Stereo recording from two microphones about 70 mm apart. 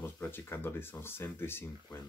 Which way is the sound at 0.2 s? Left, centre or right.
Left.